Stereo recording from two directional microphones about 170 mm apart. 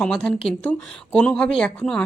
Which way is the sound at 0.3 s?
35° left (ahead or behind).